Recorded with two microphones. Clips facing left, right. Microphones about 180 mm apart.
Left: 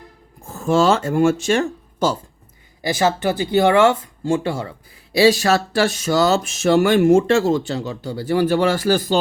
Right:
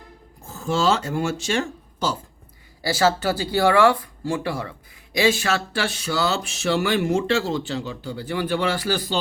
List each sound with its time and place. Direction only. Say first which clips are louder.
0.4 s speech: left 5 dB; 55° left (ahead or behind)
2.8 s speech: left 2 dB; 15° left (ahead or behind)
5.1 s speech: left 6 dB; 35° left (ahead or behind)